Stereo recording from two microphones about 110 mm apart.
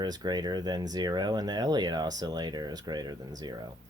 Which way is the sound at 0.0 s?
40° right (ahead or behind).